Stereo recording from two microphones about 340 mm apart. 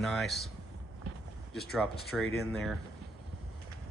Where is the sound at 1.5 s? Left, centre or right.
Centre.